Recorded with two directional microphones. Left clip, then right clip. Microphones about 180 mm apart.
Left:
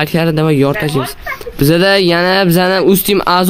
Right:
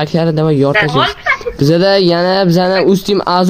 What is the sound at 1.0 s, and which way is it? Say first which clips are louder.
Speech: right 8 dB; 85° right.